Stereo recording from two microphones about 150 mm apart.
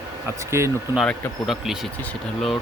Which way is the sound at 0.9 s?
Centre (ahead or behind).